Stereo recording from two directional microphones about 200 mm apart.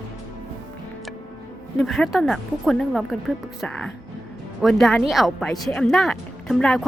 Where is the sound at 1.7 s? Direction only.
Centre (ahead or behind).